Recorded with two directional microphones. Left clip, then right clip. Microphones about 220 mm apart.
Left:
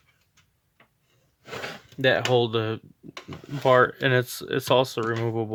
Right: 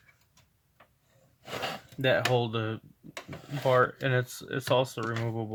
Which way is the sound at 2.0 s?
45° left (ahead or behind).